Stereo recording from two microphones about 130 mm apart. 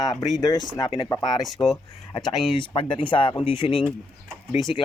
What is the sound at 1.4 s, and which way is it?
Speech, centre (ahead or behind).